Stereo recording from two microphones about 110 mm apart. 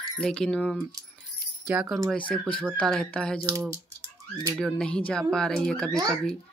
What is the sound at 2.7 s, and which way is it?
Speech, 5° left (ahead or behind).